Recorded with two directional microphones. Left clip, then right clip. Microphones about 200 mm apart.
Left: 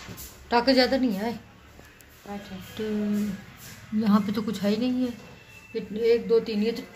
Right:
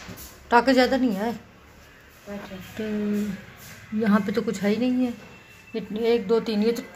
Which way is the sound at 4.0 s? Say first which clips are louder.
Right 3 dB; 10° right (ahead or behind).